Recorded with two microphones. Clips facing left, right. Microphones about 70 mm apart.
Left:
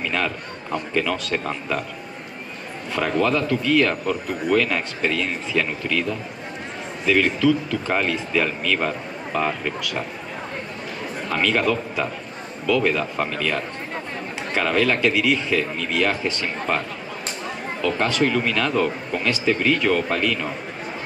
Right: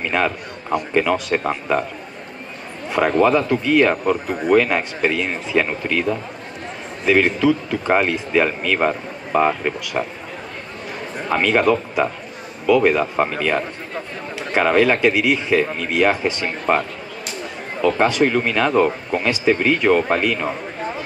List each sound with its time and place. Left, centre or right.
0.0 s a man's voice: right
2.9 s speech: right
3.9 s speech: right
4.4 s speech: right
11.2 s speech: right
15.0 s speech: centre
17.8 s speech: centre